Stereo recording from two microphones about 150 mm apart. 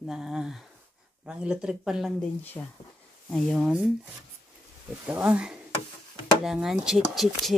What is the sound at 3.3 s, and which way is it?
Speech, 5° left (ahead or behind).